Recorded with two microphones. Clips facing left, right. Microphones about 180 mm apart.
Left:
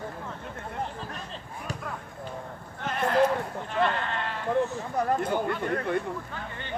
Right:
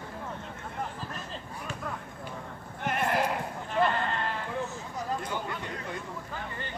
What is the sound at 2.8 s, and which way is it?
Clip-clop, 15° right (ahead or behind).